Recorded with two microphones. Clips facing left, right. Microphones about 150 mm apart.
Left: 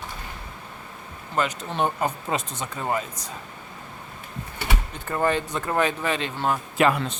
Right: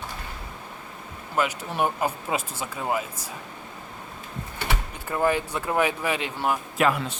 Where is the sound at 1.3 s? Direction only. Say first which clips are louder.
Even; 10° right (ahead or behind).